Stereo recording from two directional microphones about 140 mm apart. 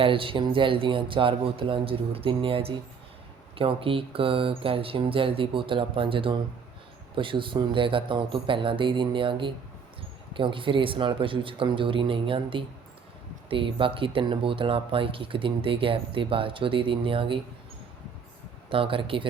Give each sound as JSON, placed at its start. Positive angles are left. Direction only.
{"t": 0.0, "sound": "speech", "side_deg": -40}
{"t": 18.7, "sound": "speech", "side_deg": -40}